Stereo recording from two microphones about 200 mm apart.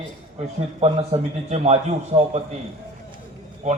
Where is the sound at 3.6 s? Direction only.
35° right (ahead or behind).